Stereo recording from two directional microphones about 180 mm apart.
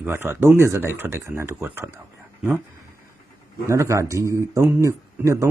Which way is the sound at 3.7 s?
15° right (ahead or behind).